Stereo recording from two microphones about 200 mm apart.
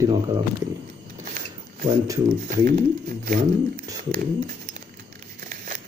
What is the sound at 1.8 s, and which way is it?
Speech, 15° right (ahead or behind).